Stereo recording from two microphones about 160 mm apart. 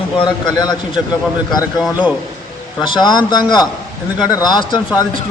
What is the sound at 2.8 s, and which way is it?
Speech, 25° left (ahead or behind).